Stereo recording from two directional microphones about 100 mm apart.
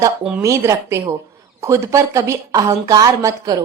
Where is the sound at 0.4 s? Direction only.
30° right (ahead or behind).